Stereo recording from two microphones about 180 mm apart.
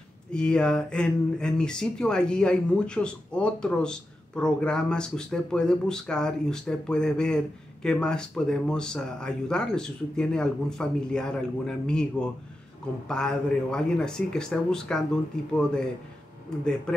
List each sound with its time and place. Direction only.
0.3 s speech: 5° left (ahead or behind)